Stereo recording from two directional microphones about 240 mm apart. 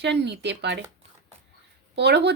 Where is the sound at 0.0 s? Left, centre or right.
Right.